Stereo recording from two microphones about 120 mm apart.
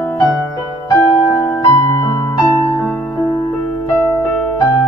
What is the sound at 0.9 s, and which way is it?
Keyboard, 25° left (ahead or behind).